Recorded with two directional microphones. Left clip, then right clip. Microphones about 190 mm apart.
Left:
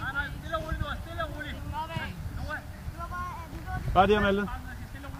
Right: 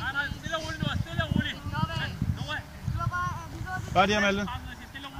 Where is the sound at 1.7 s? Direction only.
40° left (ahead or behind).